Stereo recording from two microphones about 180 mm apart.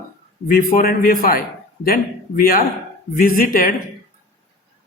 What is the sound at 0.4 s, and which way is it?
A man's voice, 55° left (ahead or behind).